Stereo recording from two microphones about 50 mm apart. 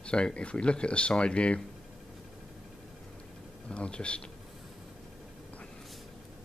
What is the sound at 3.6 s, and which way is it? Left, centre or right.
Speech, left.